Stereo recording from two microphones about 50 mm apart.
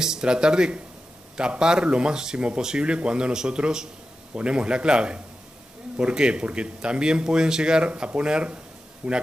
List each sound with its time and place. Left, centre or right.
0.0 s speech: centre
9.0 s a man's voice: right